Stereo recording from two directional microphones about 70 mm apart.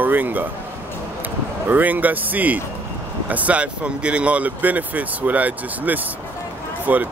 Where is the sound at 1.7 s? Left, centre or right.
Right.